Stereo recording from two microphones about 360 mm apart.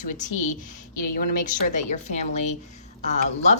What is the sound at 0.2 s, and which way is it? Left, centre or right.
A woman's voice, centre.